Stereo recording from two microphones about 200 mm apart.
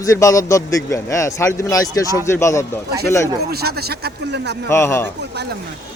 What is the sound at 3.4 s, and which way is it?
Speech, 50° right (ahead or behind).